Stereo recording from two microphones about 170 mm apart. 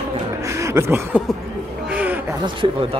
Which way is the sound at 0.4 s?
20° right (ahead or behind).